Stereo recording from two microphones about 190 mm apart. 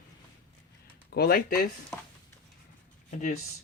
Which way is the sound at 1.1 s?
55° left (ahead or behind).